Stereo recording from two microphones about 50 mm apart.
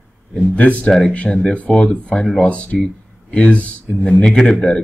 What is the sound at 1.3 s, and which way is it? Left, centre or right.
Speech, centre.